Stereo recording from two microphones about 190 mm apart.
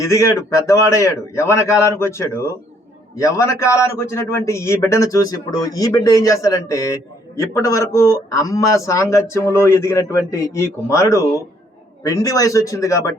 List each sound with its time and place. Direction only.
0.0 s a man's voice: 15° left (ahead or behind)